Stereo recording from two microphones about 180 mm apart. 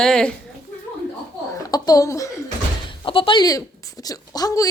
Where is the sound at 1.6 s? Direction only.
20° left (ahead or behind).